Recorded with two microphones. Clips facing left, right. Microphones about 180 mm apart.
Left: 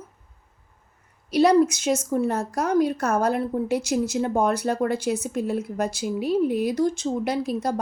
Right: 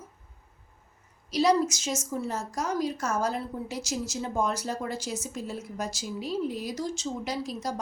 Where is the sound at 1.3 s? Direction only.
60° left (ahead or behind).